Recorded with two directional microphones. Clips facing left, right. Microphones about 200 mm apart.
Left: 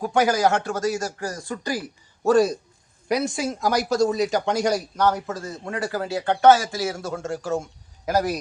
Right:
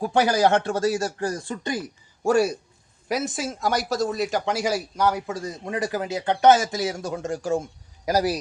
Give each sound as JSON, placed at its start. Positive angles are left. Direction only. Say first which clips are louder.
{"t": 0.1, "sound": "speech", "louder": "even", "side_deg": -30}
{"t": 2.2, "sound": "speech", "louder": "left 2 dB", "side_deg": -10}